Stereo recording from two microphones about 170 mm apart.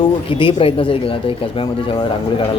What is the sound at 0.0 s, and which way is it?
Speech, 30° left (ahead or behind).